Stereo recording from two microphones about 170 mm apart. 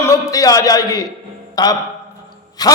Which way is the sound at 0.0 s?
20° left (ahead or behind).